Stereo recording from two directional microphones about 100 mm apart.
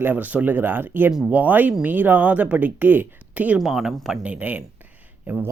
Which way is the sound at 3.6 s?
Centre (ahead or behind).